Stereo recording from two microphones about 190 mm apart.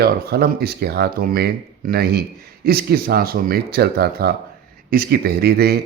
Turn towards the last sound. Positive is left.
turn(degrees=-55)  # may be behind; listen again after turning